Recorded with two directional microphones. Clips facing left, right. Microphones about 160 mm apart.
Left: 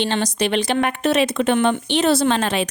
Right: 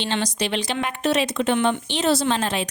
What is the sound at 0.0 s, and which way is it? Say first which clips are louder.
Speech: left 4 dB; 50° left (ahead or behind).